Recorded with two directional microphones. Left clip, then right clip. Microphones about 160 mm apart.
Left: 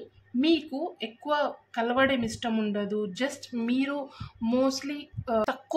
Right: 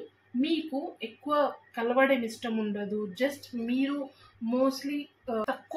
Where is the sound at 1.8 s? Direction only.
35° left (ahead or behind).